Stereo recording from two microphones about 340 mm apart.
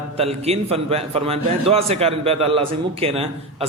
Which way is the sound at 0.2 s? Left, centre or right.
Centre.